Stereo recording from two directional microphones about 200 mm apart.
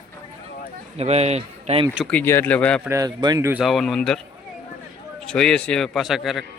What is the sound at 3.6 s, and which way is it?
Speech, centre (ahead or behind).